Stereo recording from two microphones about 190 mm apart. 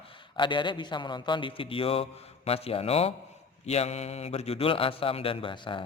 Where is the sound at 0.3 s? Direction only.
25° left (ahead or behind).